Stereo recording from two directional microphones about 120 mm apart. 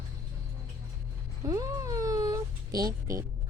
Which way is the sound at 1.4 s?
30° right (ahead or behind).